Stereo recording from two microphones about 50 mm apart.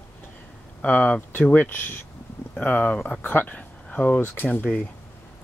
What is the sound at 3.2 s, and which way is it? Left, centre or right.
Speech, left.